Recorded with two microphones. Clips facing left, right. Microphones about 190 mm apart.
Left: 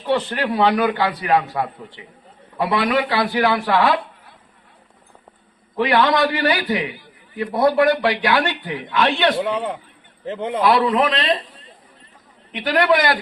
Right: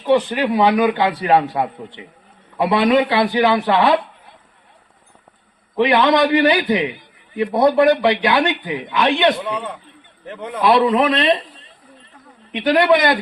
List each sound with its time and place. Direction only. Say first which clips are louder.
0.1 s a man's voice: right 4 dB; 15° right (ahead or behind)
5.7 s a man's voice: right 3 dB; 20° right (ahead or behind)
9.4 s speech: left 3 dB; 25° left (ahead or behind)
10.6 s a man's voice: right 3 dB; 25° right (ahead or behind)
12.5 s a man's voice: right 3 dB; 25° right (ahead or behind)